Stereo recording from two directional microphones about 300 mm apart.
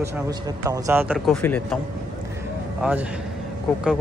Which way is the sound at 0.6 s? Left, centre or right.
Centre.